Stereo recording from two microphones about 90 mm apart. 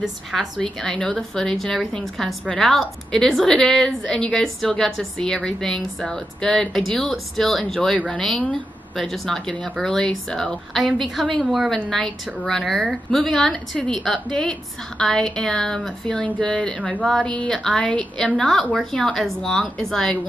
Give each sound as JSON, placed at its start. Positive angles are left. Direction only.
{"t": 0.0, "sound": "a woman's voice", "side_deg": 0}